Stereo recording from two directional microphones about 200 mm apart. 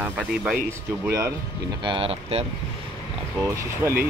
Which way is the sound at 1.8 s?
25° right (ahead or behind).